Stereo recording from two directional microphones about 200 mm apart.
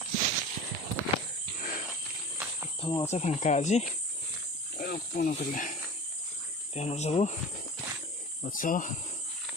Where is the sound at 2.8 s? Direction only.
20° left (ahead or behind).